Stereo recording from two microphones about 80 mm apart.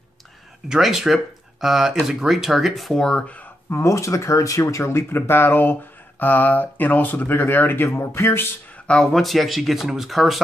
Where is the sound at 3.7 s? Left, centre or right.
Left.